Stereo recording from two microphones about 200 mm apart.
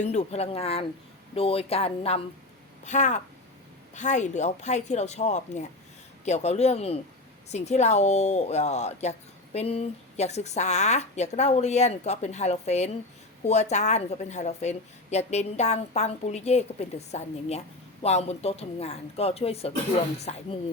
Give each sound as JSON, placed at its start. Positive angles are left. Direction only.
{"t": 0.0, "sound": "speech", "side_deg": 35}